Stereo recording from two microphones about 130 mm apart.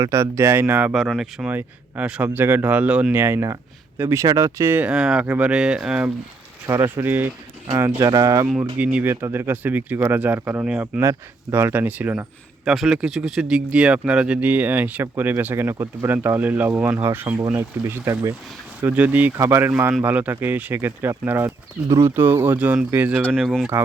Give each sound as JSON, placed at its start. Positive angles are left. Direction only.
{"t": 0.0, "sound": "speech", "side_deg": -20}
{"t": 0.9, "sound": "speech", "side_deg": -5}
{"t": 8.8, "sound": "speech", "side_deg": -10}
{"t": 12.6, "sound": "speech", "side_deg": 0}
{"t": 23.2, "sound": "speech", "side_deg": 0}